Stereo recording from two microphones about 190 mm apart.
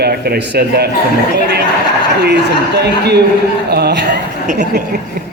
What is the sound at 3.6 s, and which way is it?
Speech, 60° right (ahead or behind).